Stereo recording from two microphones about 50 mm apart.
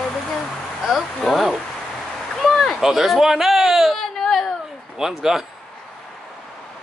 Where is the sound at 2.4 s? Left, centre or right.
Centre.